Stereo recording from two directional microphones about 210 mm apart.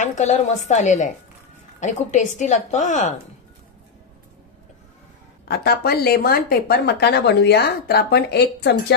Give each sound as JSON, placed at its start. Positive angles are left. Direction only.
{"t": 0.0, "sound": "a woman's voice", "side_deg": 35}
{"t": 5.4, "sound": "a woman's voice", "side_deg": 50}